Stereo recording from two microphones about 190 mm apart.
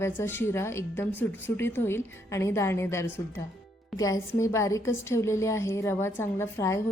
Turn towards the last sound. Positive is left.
turn(degrees=15)  # may be behind; listen again after turning